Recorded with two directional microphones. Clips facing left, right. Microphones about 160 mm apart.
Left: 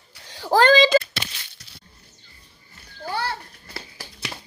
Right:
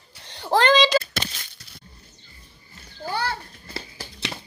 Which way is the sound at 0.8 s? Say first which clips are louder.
Left 3 dB; 55° left (ahead or behind).